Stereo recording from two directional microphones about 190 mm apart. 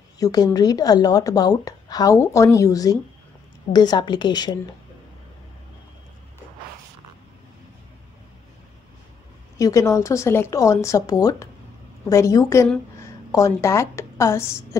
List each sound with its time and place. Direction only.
0.2 s a woman's voice: 20° left (ahead or behind)
9.6 s a woman's voice: 15° left (ahead or behind)